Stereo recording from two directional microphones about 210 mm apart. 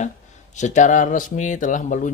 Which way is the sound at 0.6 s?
35° left (ahead or behind).